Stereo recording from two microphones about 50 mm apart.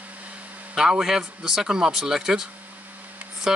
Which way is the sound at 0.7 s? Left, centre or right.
Centre.